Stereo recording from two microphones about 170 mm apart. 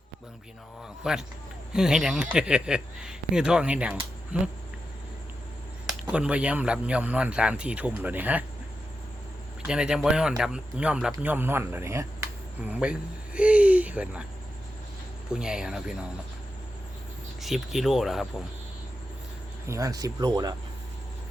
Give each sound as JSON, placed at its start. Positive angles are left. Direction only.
{"t": 1.0, "sound": "speech", "side_deg": -5}
{"t": 5.9, "sound": "speech", "side_deg": -5}
{"t": 9.6, "sound": "speech", "side_deg": -5}
{"t": 15.3, "sound": "speech", "side_deg": -5}
{"t": 17.4, "sound": "speech", "side_deg": 0}
{"t": 19.6, "sound": "speech", "side_deg": -20}